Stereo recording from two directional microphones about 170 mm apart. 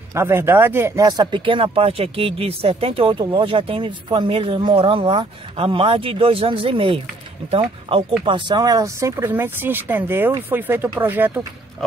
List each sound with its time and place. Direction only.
0.1 s speech: 15° right (ahead or behind)